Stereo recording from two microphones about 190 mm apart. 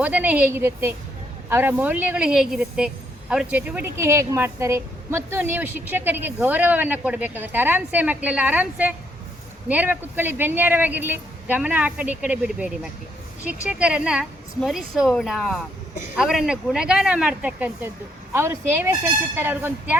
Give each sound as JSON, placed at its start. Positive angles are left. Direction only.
{"t": 0.0, "sound": "a woman's voice", "side_deg": -5}